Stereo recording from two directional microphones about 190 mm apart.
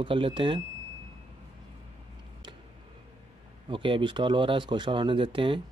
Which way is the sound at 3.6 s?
25° right (ahead or behind).